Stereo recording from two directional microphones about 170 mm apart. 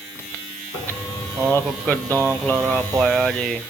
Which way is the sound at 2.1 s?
15° right (ahead or behind).